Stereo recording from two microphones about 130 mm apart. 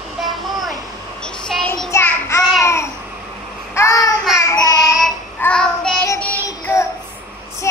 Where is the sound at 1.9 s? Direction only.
20° left (ahead or behind).